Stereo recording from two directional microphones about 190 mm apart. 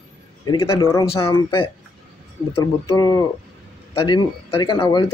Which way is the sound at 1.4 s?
25° left (ahead or behind).